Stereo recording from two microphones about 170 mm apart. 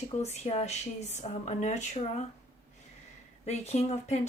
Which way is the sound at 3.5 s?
40° left (ahead or behind).